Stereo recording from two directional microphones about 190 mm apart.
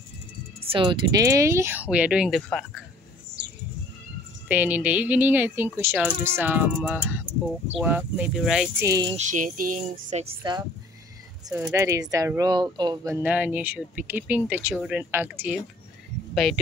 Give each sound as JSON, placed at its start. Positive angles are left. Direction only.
{"t": 0.7, "sound": "speech", "side_deg": -25}
{"t": 4.5, "sound": "speech", "side_deg": -10}
{"t": 8.8, "sound": "speech", "side_deg": -20}
{"t": 9.1, "sound": "music", "side_deg": -40}
{"t": 11.5, "sound": "speech", "side_deg": -10}